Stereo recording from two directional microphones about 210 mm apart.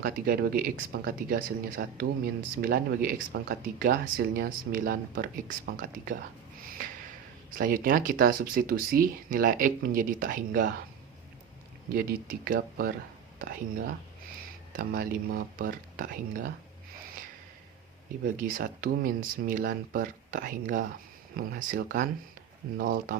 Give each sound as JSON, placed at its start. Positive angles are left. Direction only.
{"t": 0.0, "sound": "speech", "side_deg": -45}
{"t": 6.6, "sound": "snort", "side_deg": -40}
{"t": 7.6, "sound": "speech", "side_deg": -40}
{"t": 12.5, "sound": "speech", "side_deg": -45}
{"t": 18.3, "sound": "speech", "side_deg": -40}